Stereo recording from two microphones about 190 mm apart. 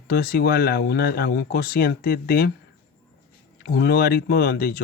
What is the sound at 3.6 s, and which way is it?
Speech, 55° left (ahead or behind).